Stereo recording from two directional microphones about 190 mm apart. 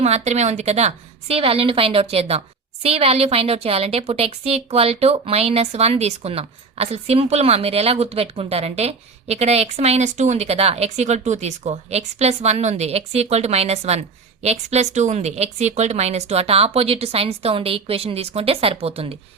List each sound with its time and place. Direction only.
0.0 s a woman's voice: 35° right (ahead or behind)